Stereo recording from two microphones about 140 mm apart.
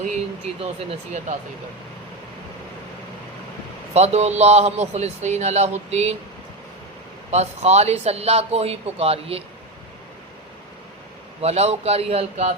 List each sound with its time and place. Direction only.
0.6 s speech: 50° right (ahead or behind)
3.9 s speech: 50° right (ahead or behind)
7.3 s speech: 50° right (ahead or behind)
11.3 s speech: 50° right (ahead or behind)